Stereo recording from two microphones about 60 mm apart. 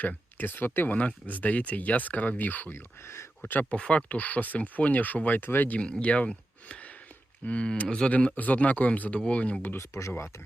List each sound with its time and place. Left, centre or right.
0.3 s speech: left
2.7 s speech: left
3.5 s speech: left
3.8 s speech: centre
5.8 s speech: centre
8.4 s speech: left
9.7 s speech: left